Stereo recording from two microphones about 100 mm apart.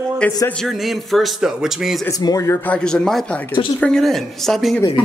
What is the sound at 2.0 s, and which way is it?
Speech, 35° left (ahead or behind).